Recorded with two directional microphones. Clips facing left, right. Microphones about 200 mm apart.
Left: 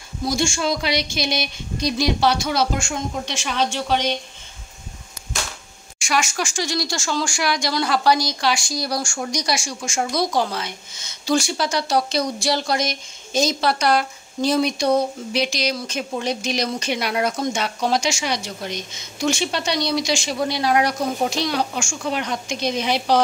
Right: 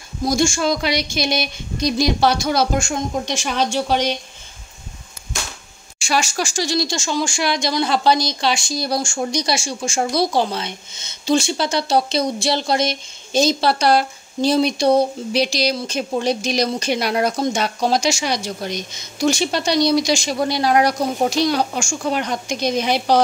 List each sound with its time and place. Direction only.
0.2 s a woman's voice: 45° right (ahead or behind)
5.9 s a woman's voice: 30° right (ahead or behind)
6.9 s a woman's voice: 20° right (ahead or behind); by 23.2 s 45° right (ahead or behind)